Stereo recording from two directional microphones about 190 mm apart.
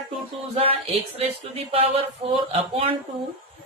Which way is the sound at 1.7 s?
30° right (ahead or behind).